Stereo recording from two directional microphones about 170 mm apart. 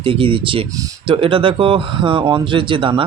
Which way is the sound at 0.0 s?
30° right (ahead or behind).